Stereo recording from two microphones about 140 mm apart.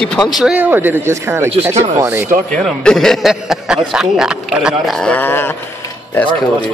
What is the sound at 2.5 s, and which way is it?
A man's voice, 5° left (ahead or behind).